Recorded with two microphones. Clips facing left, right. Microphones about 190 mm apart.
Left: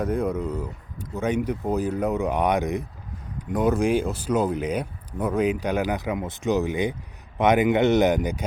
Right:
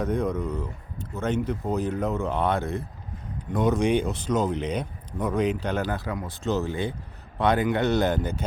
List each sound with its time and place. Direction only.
0.0 s speech: 10° left (ahead or behind)